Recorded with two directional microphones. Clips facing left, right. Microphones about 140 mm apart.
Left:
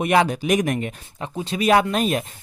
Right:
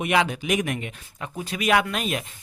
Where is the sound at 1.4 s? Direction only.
30° left (ahead or behind).